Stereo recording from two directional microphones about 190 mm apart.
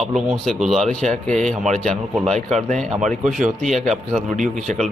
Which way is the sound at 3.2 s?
40° right (ahead or behind).